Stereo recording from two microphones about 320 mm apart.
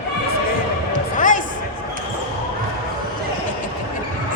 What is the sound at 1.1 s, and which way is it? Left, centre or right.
Music, left.